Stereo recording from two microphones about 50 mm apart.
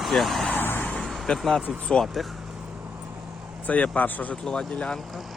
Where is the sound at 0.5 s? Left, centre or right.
Left.